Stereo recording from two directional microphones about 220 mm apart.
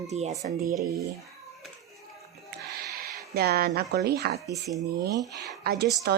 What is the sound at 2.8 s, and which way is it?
Speech, 45° right (ahead or behind).